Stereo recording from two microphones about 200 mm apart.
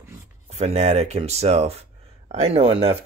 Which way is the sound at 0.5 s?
35° right (ahead or behind).